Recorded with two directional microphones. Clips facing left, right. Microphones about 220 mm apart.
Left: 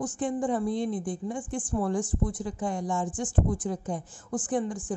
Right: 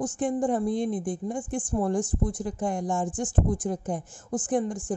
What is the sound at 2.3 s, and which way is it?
A woman's voice, 45° right (ahead or behind).